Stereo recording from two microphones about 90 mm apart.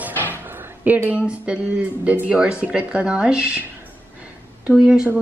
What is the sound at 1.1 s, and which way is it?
Speech, 15° right (ahead or behind).